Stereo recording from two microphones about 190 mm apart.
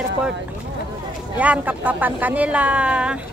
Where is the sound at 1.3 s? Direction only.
10° right (ahead or behind).